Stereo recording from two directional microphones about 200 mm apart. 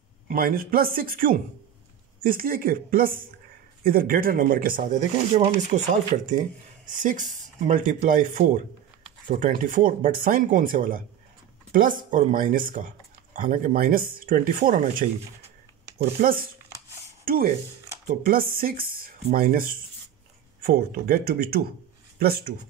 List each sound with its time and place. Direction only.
0.3 s speech: 45° right (ahead or behind)
6.9 s speech: 40° right (ahead or behind)
17.2 s a sound: 45° right (ahead or behind)
18.0 s speech: 45° right (ahead or behind)